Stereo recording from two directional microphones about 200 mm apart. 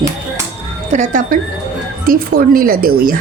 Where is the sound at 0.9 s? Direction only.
45° right (ahead or behind).